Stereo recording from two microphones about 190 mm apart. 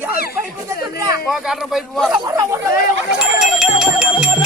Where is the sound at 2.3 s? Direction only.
15° right (ahead or behind).